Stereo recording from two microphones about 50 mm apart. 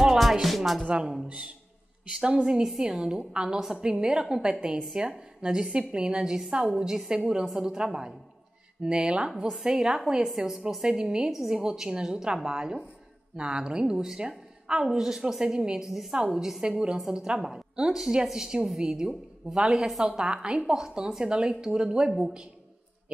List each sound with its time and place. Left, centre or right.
0.0 s music: centre
1.2 s a man's voice: right